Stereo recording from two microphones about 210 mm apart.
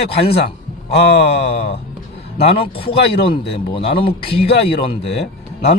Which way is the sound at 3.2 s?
25° left (ahead or behind).